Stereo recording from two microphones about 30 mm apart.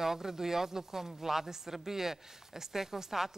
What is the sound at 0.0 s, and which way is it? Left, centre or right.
A woman's voice, centre.